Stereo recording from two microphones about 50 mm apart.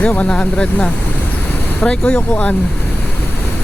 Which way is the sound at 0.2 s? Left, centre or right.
Left.